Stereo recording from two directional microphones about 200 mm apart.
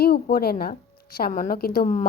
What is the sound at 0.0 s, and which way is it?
Speech, 50° left (ahead or behind).